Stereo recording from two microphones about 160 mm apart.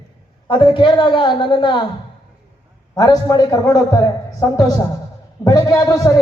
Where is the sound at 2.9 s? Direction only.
25° left (ahead or behind).